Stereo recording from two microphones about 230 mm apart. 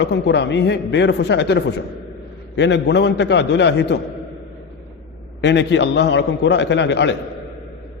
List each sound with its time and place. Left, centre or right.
0.0 s a man's voice: left
5.4 s a man's voice: left